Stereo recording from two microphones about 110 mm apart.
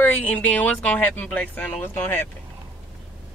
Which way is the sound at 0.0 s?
15° left (ahead or behind).